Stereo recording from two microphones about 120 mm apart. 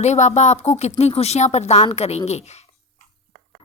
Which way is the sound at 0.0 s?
75° left (ahead or behind).